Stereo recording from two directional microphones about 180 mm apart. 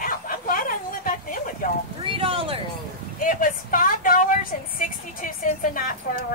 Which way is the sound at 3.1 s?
50° left (ahead or behind).